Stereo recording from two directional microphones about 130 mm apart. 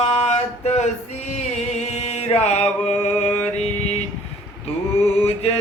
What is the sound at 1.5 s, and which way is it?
Music, 60° left (ahead or behind).